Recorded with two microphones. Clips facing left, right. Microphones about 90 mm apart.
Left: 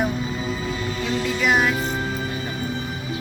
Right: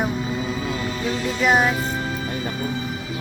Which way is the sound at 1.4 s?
30° right (ahead or behind).